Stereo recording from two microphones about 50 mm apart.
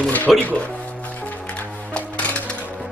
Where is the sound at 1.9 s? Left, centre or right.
Left.